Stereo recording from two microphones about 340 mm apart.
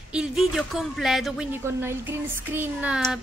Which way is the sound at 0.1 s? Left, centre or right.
Centre.